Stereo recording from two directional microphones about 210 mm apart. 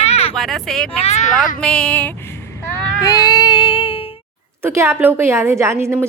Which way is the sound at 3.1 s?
15° left (ahead or behind).